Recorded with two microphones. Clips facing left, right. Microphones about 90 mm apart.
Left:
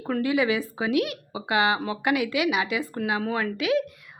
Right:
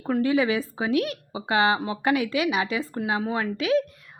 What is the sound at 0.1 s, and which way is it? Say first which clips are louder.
A woman's voice: right 1 dB; 35° right (ahead or behind).